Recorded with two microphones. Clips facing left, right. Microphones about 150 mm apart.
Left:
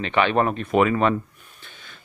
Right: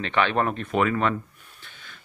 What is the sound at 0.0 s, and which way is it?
Speech, 10° left (ahead or behind).